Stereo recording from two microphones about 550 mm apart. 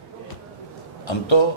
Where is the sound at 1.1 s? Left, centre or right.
Left.